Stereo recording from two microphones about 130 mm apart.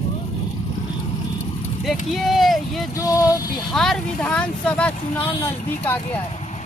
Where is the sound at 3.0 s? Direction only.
30° left (ahead or behind).